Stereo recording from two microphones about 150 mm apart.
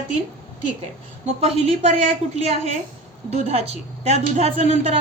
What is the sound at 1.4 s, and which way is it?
A woman's voice, 45° right (ahead or behind).